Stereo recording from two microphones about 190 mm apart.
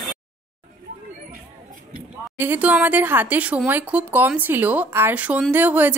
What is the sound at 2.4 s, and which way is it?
Speech, 10° right (ahead or behind).